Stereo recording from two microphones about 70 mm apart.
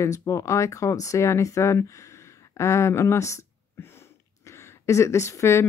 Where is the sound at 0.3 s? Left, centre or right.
Left.